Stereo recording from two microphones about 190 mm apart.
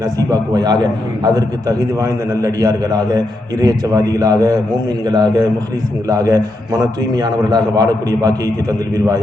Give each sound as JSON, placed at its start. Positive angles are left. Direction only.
{"t": 0.0, "sound": "a man's voice", "side_deg": -20}